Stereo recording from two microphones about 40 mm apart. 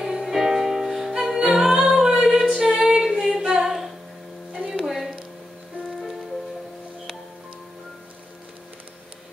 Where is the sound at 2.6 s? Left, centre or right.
Right.